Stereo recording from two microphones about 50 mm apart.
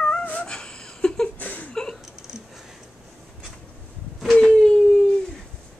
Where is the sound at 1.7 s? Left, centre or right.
Centre.